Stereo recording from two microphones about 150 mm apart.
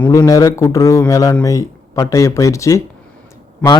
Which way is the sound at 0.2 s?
25° left (ahead or behind).